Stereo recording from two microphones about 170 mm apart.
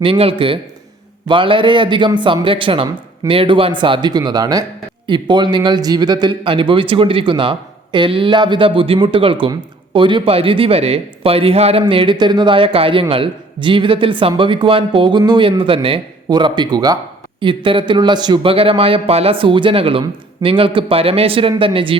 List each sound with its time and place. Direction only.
0.0 s a man's voice: 30° right (ahead or behind)